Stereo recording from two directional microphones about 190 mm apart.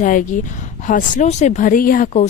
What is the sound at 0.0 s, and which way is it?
Speech, 45° left (ahead or behind).